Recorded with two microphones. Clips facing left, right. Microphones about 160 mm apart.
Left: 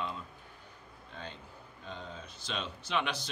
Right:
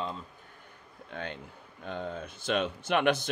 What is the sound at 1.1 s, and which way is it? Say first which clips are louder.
Speech: right 7 dB; 65° right (ahead or behind).